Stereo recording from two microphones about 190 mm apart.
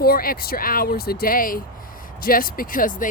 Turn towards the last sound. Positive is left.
turn(degrees=45)  # may be behind; listen again after turning